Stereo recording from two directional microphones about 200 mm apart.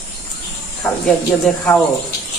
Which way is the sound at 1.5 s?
Centre (ahead or behind).